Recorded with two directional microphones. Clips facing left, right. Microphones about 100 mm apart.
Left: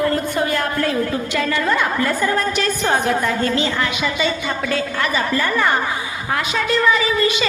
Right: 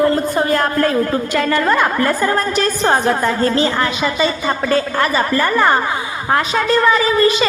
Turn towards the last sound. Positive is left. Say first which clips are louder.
# right 4 dB
turn(degrees=-40)  # may be behind; listen again after turning